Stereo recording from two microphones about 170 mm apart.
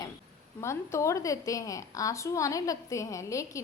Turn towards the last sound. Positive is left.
turn(degrees=20)  # may be behind; listen again after turning